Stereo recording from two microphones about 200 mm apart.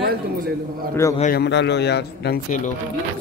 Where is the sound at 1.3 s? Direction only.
60° left (ahead or behind); by 2.7 s 40° left (ahead or behind).